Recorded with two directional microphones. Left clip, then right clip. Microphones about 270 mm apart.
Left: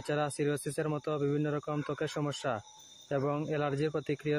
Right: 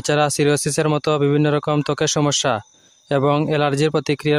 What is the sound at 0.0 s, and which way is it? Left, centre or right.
Speech, right.